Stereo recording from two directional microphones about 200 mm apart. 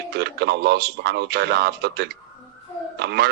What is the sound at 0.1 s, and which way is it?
A man's voice, 55° right (ahead or behind).